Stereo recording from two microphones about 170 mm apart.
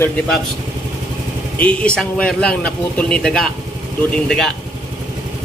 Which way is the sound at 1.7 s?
5° left (ahead or behind).